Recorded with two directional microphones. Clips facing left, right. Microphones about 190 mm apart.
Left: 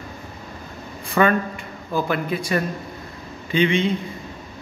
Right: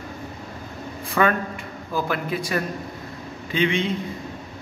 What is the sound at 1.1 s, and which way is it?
Speech, centre (ahead or behind).